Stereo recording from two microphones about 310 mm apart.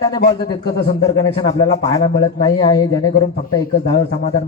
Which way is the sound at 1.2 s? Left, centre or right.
Centre.